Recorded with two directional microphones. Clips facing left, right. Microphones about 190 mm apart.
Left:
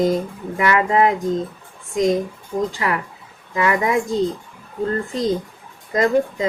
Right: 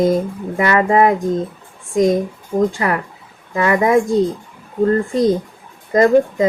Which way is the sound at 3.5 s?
45° right (ahead or behind).